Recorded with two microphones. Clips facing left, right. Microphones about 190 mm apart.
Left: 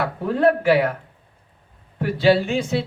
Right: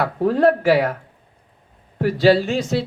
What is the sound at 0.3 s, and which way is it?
Speech, 55° left (ahead or behind).